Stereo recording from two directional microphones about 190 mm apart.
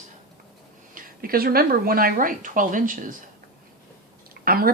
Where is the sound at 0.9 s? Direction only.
50° right (ahead or behind).